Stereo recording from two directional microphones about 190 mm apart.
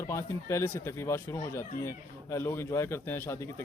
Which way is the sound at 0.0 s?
15° left (ahead or behind).